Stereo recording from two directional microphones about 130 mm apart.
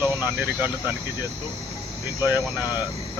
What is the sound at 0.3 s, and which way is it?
Speech, 15° right (ahead or behind).